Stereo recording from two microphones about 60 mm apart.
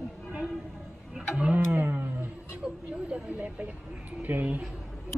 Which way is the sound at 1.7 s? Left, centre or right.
Right.